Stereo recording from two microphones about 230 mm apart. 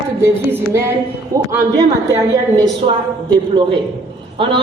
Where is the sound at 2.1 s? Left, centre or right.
Centre.